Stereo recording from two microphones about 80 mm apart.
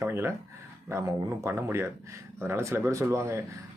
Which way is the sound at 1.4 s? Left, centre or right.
Right.